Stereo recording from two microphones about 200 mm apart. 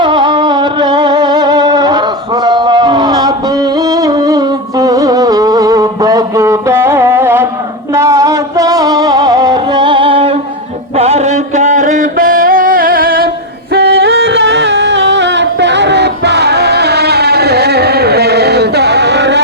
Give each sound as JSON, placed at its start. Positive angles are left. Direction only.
{"t": 0.0, "sound": "music", "side_deg": -20}
{"t": 10.9, "sound": "a sound", "side_deg": -30}
{"t": 13.7, "sound": "music", "side_deg": -55}